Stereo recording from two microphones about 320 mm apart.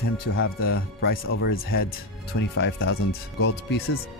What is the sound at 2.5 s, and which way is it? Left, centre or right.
Speech, left.